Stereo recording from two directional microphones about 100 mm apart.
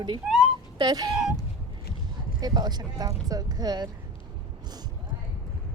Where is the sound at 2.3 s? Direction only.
45° right (ahead or behind).